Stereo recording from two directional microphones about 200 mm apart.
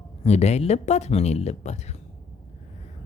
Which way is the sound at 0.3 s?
35° left (ahead or behind).